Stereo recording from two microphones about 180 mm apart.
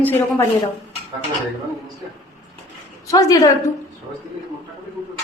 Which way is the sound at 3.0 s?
20° left (ahead or behind).